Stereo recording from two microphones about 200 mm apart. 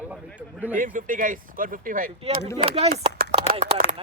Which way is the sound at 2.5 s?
30° right (ahead or behind).